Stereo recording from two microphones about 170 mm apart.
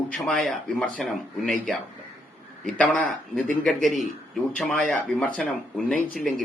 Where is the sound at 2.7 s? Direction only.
5° left (ahead or behind).